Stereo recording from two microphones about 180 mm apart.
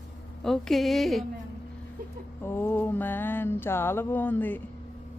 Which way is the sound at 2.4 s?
10° left (ahead or behind).